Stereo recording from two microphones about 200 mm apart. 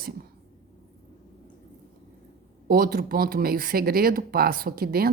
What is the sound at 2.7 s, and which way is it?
Speech, 45° right (ahead or behind).